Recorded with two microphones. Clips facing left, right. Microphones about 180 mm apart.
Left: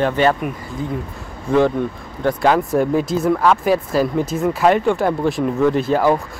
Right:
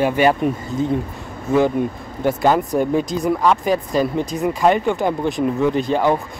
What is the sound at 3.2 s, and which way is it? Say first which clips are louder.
Speech: left 2 dB; 15° right (ahead or behind).